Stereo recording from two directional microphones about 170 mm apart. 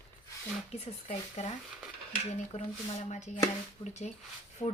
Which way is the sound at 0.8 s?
40° left (ahead or behind).